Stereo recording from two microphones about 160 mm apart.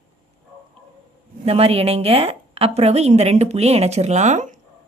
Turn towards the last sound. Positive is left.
turn(degrees=-50)  # may be behind; listen again after turning